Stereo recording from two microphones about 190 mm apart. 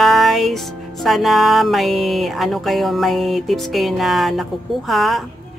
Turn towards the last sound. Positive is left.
turn(degrees=0)  # may be behind; listen again after turning